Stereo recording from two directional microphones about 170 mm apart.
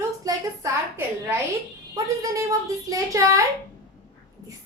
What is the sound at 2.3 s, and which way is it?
A woman's voice, 20° right (ahead or behind).